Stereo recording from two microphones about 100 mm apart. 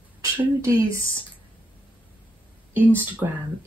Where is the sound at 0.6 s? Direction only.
30° right (ahead or behind).